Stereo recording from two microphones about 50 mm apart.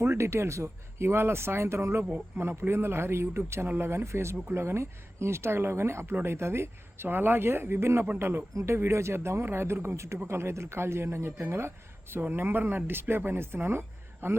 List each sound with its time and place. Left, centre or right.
0.0 s speech: right
9.8 s a man's voice: right
10.2 s speech: right
12.2 s speech: right